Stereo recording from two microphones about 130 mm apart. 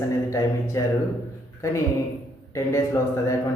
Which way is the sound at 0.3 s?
20° left (ahead or behind).